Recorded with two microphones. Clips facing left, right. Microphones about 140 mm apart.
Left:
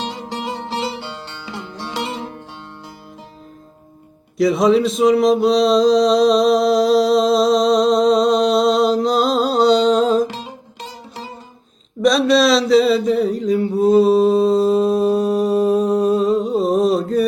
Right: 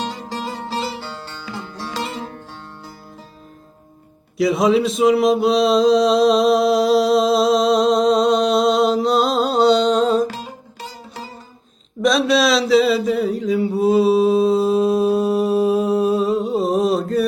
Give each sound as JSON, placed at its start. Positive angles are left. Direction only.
{"t": 0.0, "sound": "music", "side_deg": 25}
{"t": 4.4, "sound": "a sound", "side_deg": 0}
{"t": 10.8, "sound": "music", "side_deg": 20}
{"t": 12.0, "sound": "mantra", "side_deg": 0}